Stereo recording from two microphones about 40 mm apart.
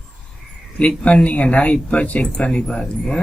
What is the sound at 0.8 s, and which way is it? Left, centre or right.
A man's voice, left.